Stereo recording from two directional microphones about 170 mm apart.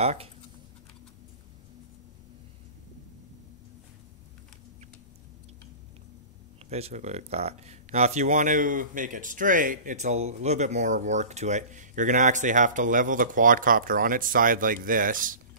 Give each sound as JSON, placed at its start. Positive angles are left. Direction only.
{"t": 0.0, "sound": "speech", "side_deg": -35}
{"t": 6.7, "sound": "speech", "side_deg": -40}